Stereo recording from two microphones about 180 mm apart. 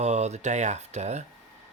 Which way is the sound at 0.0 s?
40° right (ahead or behind).